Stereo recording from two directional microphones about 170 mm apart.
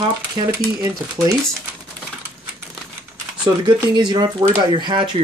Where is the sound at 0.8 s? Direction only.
15° right (ahead or behind).